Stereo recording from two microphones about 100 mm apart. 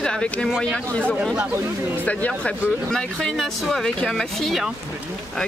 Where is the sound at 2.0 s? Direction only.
15° left (ahead or behind).